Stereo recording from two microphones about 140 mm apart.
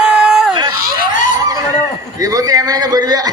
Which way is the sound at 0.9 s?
70° left (ahead or behind).